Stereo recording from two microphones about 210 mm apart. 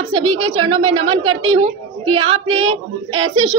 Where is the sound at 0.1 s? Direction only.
25° right (ahead or behind).